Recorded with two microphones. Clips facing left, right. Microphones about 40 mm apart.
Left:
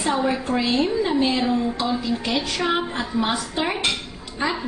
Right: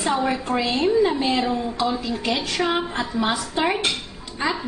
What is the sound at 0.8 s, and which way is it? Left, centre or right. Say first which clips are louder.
A woman's voice: right 2 dB; centre.